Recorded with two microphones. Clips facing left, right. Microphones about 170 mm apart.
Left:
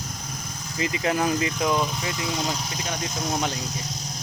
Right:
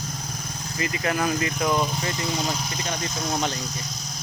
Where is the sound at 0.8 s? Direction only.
20° left (ahead or behind).